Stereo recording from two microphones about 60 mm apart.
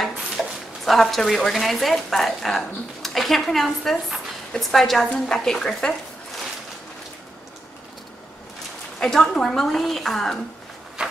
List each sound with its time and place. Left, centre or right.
0.0 s a woman's voice: centre
9.0 s a woman's voice: centre
11.0 s a sound: centre